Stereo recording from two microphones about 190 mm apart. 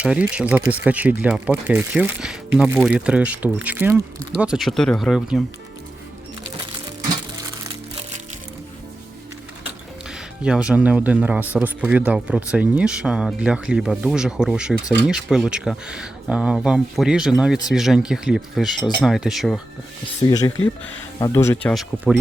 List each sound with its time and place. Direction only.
0.0 s speech: 5° right (ahead or behind)
10.1 s speech: 5° right (ahead or behind)
20.2 s speech: 15° left (ahead or behind)